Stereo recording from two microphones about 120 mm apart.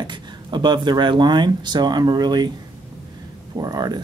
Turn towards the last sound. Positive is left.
turn(degrees=-35)  # may be behind; listen again after turning